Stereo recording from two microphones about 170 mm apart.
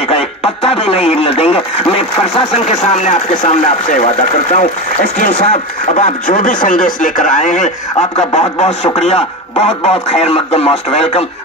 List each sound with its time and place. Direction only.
0.1 s speech: 35° left (ahead or behind)